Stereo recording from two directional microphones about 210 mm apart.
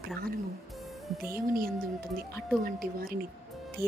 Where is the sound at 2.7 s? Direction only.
45° right (ahead or behind).